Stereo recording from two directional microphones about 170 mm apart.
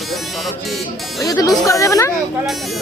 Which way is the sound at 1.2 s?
20° left (ahead or behind).